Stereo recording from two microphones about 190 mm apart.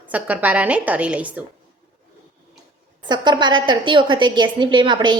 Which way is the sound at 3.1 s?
25° right (ahead or behind).